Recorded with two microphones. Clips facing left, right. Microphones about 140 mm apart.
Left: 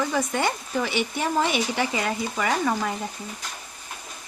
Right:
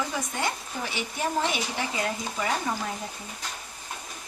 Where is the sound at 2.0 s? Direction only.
85° left.